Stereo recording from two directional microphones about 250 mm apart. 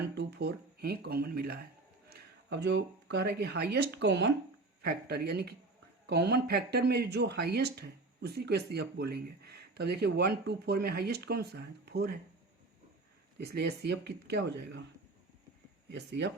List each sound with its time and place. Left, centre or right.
0.0 s speech: right
13.4 s speech: right
15.9 s speech: right